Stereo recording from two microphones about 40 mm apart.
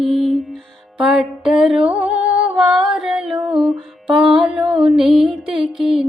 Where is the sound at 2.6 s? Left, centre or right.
Centre.